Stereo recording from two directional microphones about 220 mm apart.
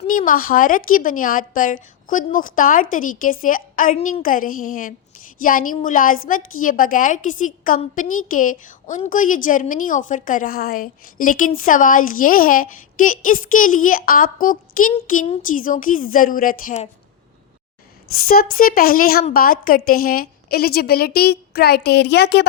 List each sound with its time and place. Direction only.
0.1 s a woman's voice: 40° left (ahead or behind)
18.3 s a woman's voice: 40° left (ahead or behind)